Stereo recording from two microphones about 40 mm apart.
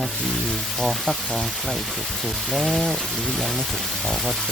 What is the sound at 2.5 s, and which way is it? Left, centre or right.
Speech, centre.